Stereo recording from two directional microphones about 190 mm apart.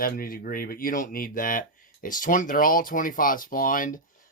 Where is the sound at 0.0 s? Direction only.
50° left (ahead or behind).